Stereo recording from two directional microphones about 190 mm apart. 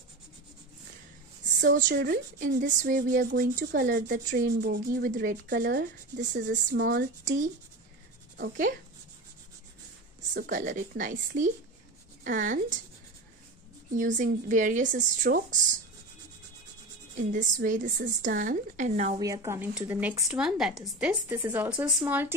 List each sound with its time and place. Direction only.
1.7 s speech: 45° right (ahead or behind)
5.7 s speech: 65° right (ahead or behind)
8.4 s speech: 45° right (ahead or behind)
10.3 s speech: 45° right (ahead or behind)
13.9 s a woman's voice: 40° right (ahead or behind)
17.3 s a woman's voice: 45° right (ahead or behind)
19.1 s speech: 15° right (ahead or behind)
21.3 s speech: 15° right (ahead or behind)